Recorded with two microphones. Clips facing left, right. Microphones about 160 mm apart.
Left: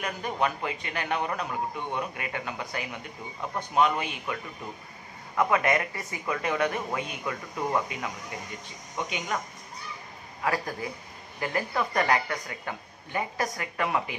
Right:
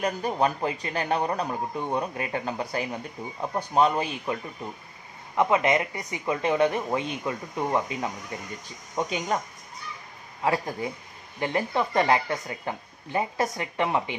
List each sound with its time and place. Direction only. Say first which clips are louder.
0.0 s a man's voice: right 4 dB; 35° right (ahead or behind)
5.3 s a man's voice: right 2 dB; 20° right (ahead or behind)
10.4 s speech: right 3 dB; 25° right (ahead or behind)